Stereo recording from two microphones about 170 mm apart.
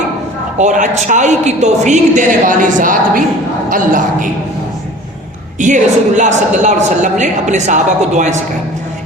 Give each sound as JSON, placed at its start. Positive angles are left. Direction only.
{"t": 0.6, "sound": "a woman's voice", "side_deg": -45}
{"t": 5.5, "sound": "a woman's voice", "side_deg": -45}